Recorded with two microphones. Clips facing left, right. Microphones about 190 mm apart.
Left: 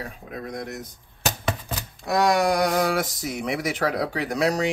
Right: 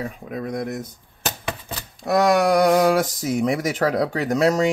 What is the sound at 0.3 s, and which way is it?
Speech, 55° right (ahead or behind).